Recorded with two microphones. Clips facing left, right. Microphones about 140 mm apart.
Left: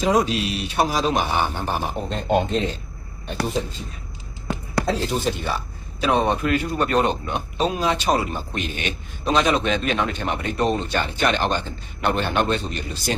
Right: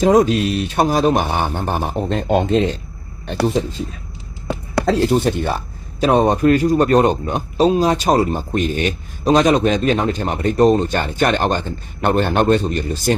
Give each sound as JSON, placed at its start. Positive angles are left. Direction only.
{"t": 0.0, "sound": "speech", "side_deg": -50}
{"t": 2.0, "sound": "speech", "side_deg": -90}
{"t": 4.9, "sound": "speech", "side_deg": -55}